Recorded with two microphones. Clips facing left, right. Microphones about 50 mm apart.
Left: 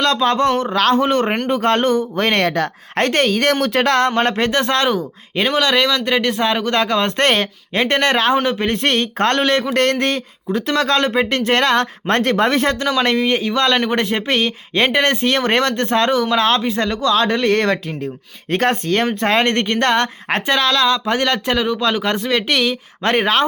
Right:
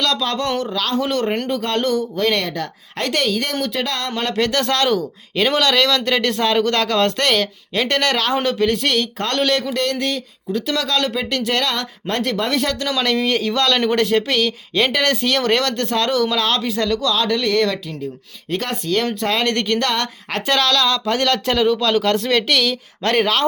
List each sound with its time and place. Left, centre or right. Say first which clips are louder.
0.0 s speech: left 5 dB; left
0.8 s speech: left 7 dB; left
3.4 s speech: left 7 dB; left
4.1 s speech: left 3 dB; left
7.2 s speech: left 2 dB; left
9.4 s speech: left 2 dB; left
9.7 s speech: left 4 dB; left
20.5 s speech: left 1 dB; left